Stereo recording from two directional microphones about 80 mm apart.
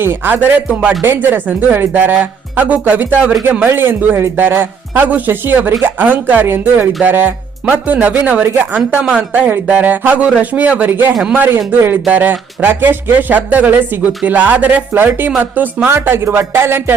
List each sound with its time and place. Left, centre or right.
0.0 s speech: right